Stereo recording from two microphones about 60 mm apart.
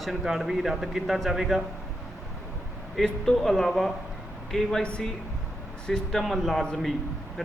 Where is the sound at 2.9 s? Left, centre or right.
Centre.